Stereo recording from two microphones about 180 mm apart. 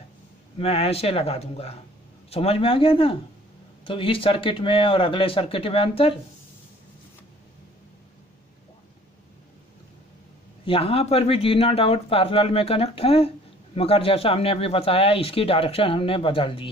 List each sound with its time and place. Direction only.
0.6 s speech: 35° left (ahead or behind)
10.6 s speech: 30° left (ahead or behind)